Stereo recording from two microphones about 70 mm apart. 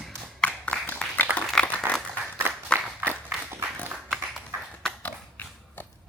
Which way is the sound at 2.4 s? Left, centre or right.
Right.